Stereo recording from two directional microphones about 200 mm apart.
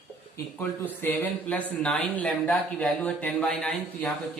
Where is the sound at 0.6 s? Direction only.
10° left (ahead or behind).